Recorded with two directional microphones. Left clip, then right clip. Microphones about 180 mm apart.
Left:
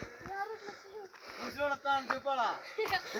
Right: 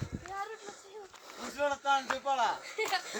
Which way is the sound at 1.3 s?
30° right (ahead or behind).